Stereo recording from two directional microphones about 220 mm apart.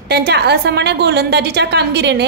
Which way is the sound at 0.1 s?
50° right (ahead or behind).